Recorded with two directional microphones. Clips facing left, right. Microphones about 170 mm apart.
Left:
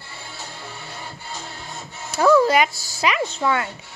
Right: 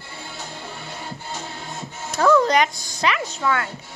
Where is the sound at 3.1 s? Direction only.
25° left (ahead or behind).